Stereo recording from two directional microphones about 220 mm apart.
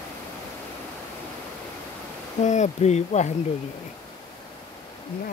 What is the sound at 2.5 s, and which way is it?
Speech, 30° left (ahead or behind).